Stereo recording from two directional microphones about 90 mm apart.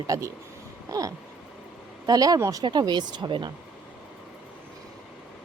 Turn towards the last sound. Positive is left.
turn(degrees=-60)  # may be behind; listen again after turning